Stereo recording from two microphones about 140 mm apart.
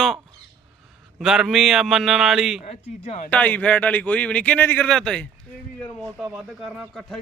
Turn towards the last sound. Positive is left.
turn(degrees=0)  # may be behind; listen again after turning